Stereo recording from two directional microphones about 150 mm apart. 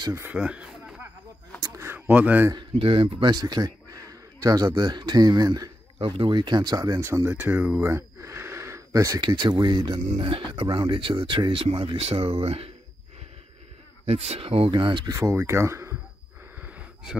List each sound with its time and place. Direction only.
0.0 s a sound: 15° right (ahead or behind)
2.8 s a man's voice: 40° right (ahead or behind)
14.0 s speech: 45° right (ahead or behind)
15.1 s speech: 20° right (ahead or behind)